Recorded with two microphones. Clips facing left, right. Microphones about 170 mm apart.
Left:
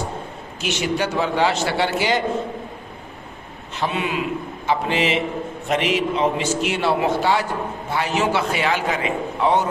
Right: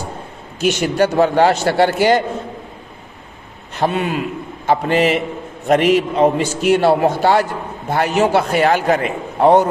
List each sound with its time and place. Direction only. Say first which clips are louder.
0.6 s a man's voice: right 7 dB; 45° right (ahead or behind)
3.8 s a man's voice: right 5 dB; 45° right (ahead or behind)